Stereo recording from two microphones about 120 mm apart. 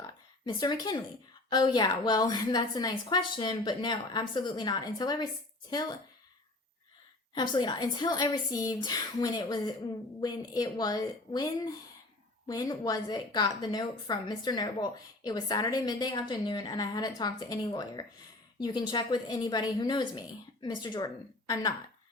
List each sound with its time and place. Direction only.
0.4 s a woman's voice: 35° left (ahead or behind)
3.9 s speech: 50° left (ahead or behind)
4.4 s a woman's voice: 35° left (ahead or behind)
7.3 s a woman's voice: 40° left (ahead or behind)